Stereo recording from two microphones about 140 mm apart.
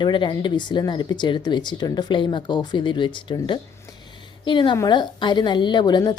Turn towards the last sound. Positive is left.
turn(degrees=30)  # may be behind; listen again after turning